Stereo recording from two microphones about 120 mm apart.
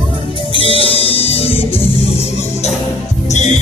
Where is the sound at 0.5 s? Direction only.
50° left (ahead or behind).